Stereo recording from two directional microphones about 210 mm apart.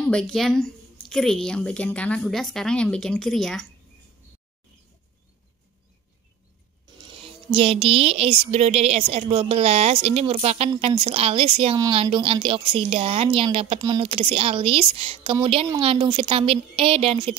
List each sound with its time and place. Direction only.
0.0 s a woman's voice: 5° left (ahead or behind)
7.0 s speech: 25° right (ahead or behind)